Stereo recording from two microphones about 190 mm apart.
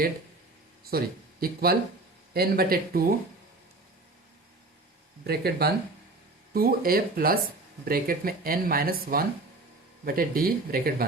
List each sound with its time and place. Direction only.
0.9 s speech: 50° right (ahead or behind)
5.2 s speech: 55° right (ahead or behind)